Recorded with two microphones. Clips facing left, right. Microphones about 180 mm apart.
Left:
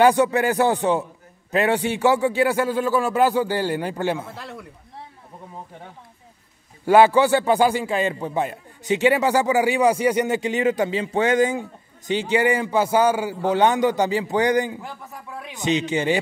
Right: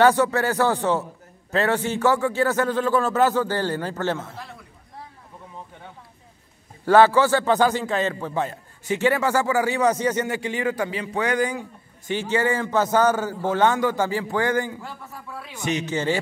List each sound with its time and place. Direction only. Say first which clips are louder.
0.0 s a man's voice: left 1 dB; 15° left (ahead or behind)
7.1 s a man's voice: left 2 dB; 15° left (ahead or behind)